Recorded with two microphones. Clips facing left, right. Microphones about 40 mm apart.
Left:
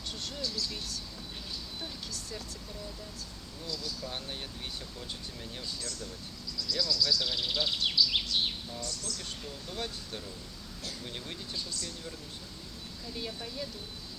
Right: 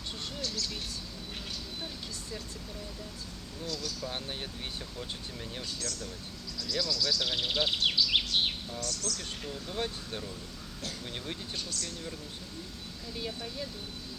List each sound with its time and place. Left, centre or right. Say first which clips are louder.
0.4 s speech: even; right
4.0 s speech: right 2 dB; centre
5.6 s speech: even; right
6.6 s speech: left 1 dB; right
8.8 s speech: right 5 dB; right
9.4 s speech: right 5 dB; right
11.5 s speech: right 1 dB; right
13.1 s speech: right 1 dB; centre